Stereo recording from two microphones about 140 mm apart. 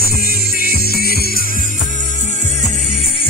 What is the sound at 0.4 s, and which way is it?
Music, 90° left.